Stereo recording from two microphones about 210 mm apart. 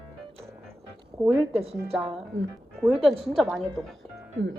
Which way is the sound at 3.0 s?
Centre (ahead or behind).